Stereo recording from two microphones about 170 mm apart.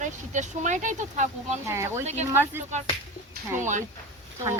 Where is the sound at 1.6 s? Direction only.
15° right (ahead or behind).